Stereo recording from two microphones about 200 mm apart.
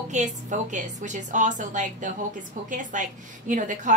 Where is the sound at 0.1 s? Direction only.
35° right (ahead or behind).